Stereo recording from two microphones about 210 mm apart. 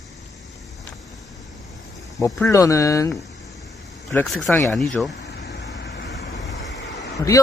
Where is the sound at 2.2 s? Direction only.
15° left (ahead or behind).